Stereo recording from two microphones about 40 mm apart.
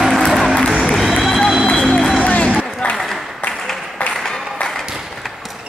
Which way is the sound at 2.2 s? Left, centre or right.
Left.